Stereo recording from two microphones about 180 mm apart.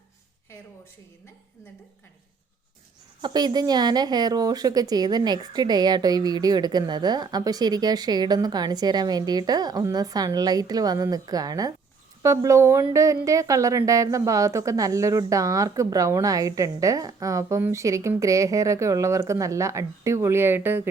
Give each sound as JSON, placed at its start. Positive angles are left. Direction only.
{"t": 3.2, "sound": "a woman's voice", "side_deg": -25}